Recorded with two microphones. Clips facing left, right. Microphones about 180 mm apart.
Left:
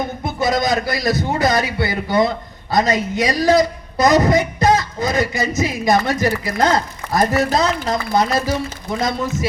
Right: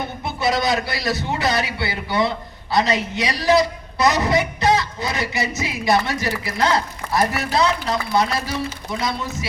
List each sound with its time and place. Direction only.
0.3 s a man's voice: 40° left (ahead or behind)